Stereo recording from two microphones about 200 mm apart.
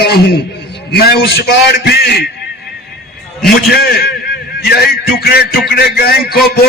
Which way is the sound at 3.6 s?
50° left (ahead or behind).